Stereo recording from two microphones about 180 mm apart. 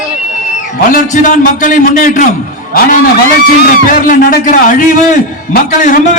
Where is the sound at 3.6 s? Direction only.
55° left (ahead or behind).